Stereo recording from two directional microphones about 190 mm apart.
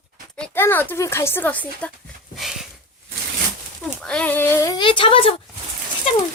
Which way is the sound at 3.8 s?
5° left (ahead or behind).